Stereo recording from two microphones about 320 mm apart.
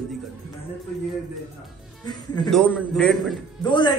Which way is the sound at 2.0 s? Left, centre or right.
Centre.